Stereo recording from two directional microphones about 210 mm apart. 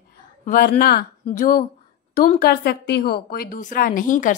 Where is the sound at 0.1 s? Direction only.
40° left (ahead or behind).